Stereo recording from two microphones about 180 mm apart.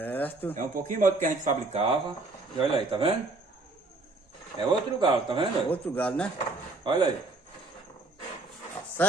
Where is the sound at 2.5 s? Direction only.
30° right (ahead or behind).